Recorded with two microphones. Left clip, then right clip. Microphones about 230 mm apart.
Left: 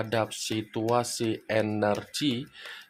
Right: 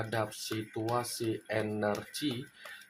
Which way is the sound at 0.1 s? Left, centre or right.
Left.